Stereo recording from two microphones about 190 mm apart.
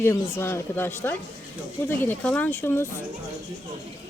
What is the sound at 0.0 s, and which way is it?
A woman's voice, 15° left (ahead or behind).